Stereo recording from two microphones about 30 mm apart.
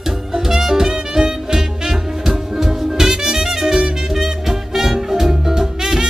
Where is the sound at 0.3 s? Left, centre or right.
Centre.